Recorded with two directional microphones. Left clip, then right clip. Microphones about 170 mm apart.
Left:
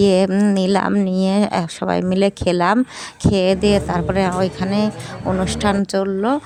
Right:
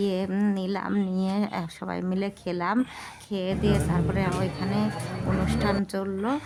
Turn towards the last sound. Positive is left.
turn(degrees=40)  # may be behind; listen again after turning